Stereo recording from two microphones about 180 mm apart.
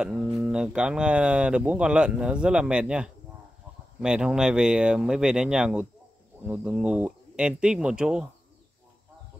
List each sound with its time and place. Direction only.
0.4 s speech: 5° right (ahead or behind)